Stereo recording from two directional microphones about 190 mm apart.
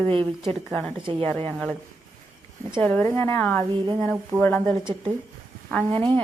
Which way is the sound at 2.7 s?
10° left (ahead or behind).